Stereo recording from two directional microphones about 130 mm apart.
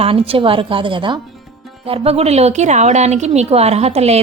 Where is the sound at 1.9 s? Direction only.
50° right (ahead or behind).